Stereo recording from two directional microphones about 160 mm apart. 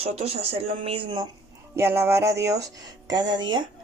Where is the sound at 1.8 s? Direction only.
15° right (ahead or behind).